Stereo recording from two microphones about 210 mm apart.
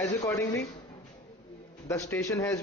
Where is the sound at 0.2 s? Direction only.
15° left (ahead or behind).